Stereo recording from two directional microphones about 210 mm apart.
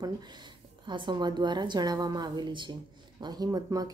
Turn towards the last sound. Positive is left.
turn(degrees=-15)  # may be behind; listen again after turning